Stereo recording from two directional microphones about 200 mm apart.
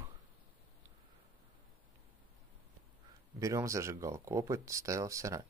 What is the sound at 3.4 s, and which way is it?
Speech, 15° right (ahead or behind).